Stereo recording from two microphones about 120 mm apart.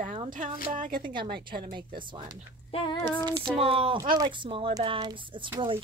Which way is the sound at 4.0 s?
30° right (ahead or behind).